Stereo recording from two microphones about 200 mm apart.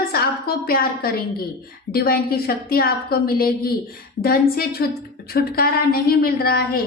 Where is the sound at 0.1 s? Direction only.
50° left (ahead or behind).